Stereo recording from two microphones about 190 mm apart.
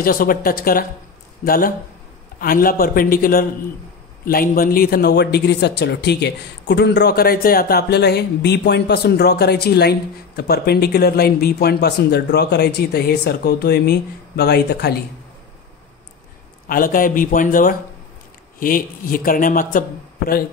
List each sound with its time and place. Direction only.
0.0 s a man's voice: 50° left (ahead or behind)
16.6 s speech: 50° left (ahead or behind)